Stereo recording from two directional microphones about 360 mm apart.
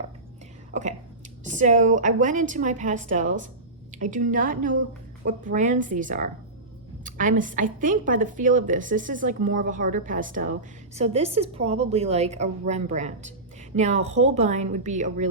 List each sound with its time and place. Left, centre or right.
0.7 s a woman's voice: centre